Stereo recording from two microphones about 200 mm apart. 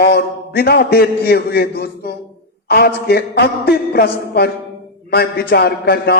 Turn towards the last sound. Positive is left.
turn(degrees=50)  # may be behind; listen again after turning